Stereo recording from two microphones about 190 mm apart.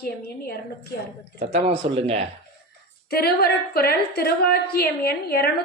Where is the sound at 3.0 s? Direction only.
55° left (ahead or behind).